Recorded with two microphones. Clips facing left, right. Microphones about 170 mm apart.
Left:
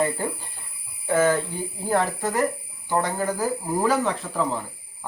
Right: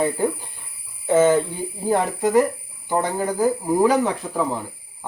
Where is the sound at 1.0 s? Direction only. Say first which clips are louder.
Right 5 dB; 25° right (ahead or behind).